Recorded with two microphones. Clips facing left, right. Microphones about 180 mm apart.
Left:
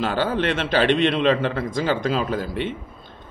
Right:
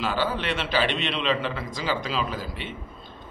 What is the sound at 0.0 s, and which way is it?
Speech, 55° left (ahead or behind).